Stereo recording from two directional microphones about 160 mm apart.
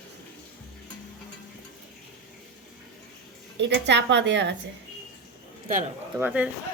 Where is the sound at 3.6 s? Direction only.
90° right.